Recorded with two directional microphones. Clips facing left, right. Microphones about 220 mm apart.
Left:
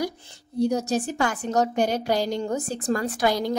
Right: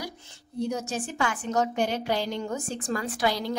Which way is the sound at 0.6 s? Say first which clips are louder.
Left 7 dB; 40° left (ahead or behind).